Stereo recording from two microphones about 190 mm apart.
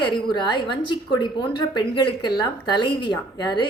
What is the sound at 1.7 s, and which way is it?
A woman's voice, 25° left (ahead or behind).